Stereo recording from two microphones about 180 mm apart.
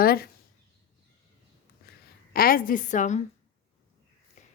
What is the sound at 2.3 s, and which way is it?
Speech, 55° left (ahead or behind).